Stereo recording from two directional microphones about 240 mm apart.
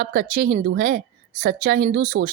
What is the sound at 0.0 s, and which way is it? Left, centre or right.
A woman's voice, right.